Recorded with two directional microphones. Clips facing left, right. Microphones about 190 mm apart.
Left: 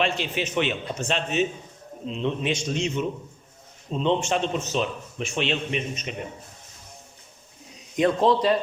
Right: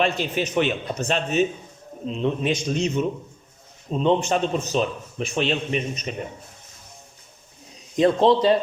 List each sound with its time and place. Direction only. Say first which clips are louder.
0.0 s a man's voice: right 3 dB; 40° right (ahead or behind)
3.9 s a man's voice: right 3 dB; 40° right (ahead or behind)
7.9 s a man's voice: right 3 dB; 30° right (ahead or behind)